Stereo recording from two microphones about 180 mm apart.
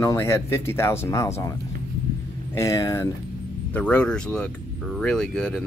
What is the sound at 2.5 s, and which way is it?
Speech, 15° left (ahead or behind).